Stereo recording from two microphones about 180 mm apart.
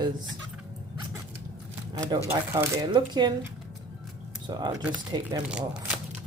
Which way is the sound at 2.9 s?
25° right (ahead or behind).